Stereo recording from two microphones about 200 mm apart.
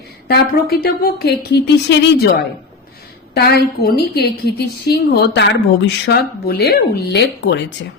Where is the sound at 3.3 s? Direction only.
50° left (ahead or behind).